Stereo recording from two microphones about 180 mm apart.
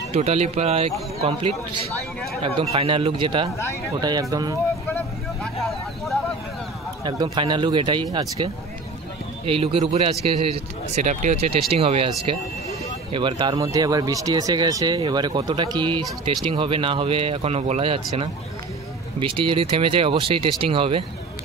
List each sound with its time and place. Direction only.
0.1 s speech: 35° right (ahead or behind)
2.4 s speech: 30° right (ahead or behind)
4.8 s vehicle: 5° left (ahead or behind)
7.1 s speech: 25° right (ahead or behind)
9.5 s speech: 35° right (ahead or behind)
13.1 s speech: 30° right (ahead or behind)
19.1 s speech: 30° right (ahead or behind)